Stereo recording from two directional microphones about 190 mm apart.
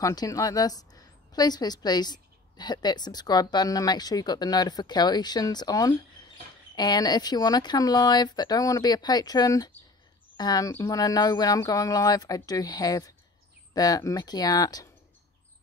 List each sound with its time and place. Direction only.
0.0 s a woman's voice: 20° left (ahead or behind)